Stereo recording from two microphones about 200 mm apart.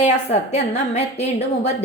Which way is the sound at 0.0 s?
35° left (ahead or behind).